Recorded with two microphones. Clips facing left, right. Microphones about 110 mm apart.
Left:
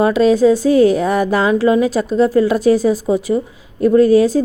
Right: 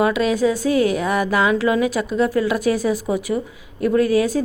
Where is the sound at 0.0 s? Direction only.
30° left (ahead or behind).